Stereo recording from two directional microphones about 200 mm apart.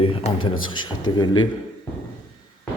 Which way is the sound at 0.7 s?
20° left (ahead or behind).